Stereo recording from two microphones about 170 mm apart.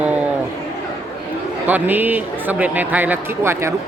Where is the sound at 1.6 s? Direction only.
10° right (ahead or behind).